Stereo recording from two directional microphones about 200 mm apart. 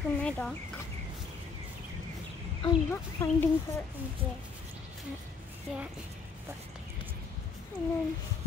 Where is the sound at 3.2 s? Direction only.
10° left (ahead or behind).